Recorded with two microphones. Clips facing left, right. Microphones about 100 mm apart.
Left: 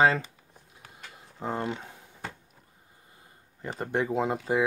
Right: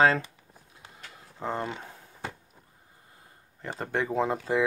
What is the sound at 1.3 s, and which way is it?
Speech, 5° left (ahead or behind).